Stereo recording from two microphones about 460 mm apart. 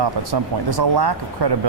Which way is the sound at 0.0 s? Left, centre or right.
Right.